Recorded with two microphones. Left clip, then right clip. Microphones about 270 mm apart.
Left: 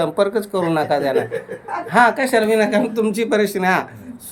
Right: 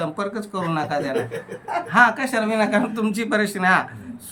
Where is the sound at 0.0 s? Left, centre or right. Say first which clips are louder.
Left 8 dB; centre.